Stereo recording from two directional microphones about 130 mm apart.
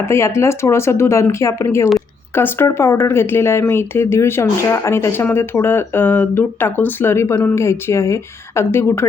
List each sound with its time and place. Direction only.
0.0 s speech: 20° left (ahead or behind)